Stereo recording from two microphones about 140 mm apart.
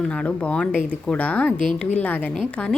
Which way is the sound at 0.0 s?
10° left (ahead or behind).